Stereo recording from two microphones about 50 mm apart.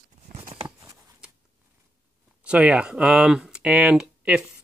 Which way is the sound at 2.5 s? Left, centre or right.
Right.